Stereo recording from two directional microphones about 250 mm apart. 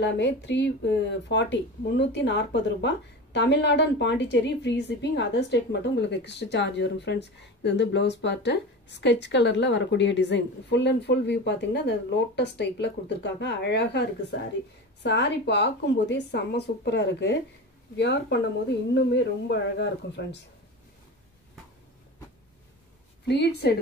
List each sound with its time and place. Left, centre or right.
0.0 s a woman's voice: left
23.2 s a woman's voice: left